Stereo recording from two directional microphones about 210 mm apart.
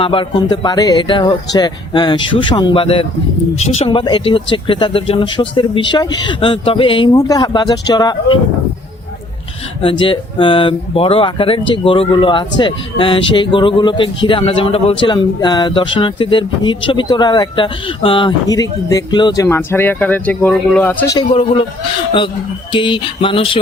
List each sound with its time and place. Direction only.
0.0 s speech: 25° left (ahead or behind)
10.0 s speech: 25° left (ahead or behind); by 21.2 s 10° left (ahead or behind)
21.2 s speech: 25° left (ahead or behind)
22.7 s speech: 25° left (ahead or behind)